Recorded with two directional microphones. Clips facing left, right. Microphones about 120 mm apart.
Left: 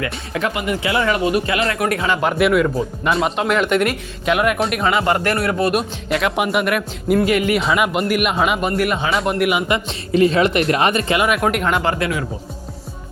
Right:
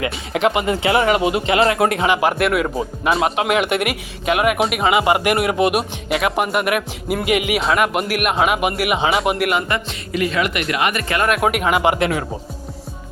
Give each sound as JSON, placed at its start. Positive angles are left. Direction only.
{"t": 0.4, "sound": "speech", "side_deg": -25}
{"t": 2.2, "sound": "speech", "side_deg": -5}
{"t": 5.7, "sound": "speech", "side_deg": -5}
{"t": 7.6, "sound": "speech", "side_deg": 0}
{"t": 9.7, "sound": "speech", "side_deg": 20}
{"t": 10.1, "sound": "speech", "side_deg": 30}
{"t": 11.3, "sound": "speech", "side_deg": -5}